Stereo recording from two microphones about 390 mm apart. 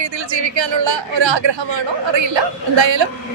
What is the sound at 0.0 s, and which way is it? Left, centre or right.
Speech, right.